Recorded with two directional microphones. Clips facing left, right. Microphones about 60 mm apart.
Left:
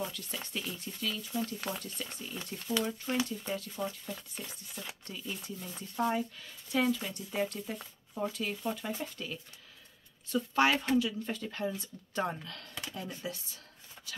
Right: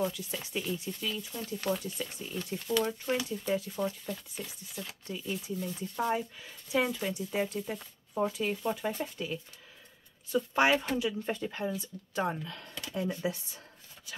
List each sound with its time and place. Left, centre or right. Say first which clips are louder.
0.0 s speech: right 5 dB; centre
3.3 s speech: right 5 dB; centre
3.8 s speech: right 3 dB; centre; by 13.6 s right